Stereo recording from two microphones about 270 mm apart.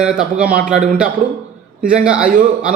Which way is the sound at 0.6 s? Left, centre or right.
Right.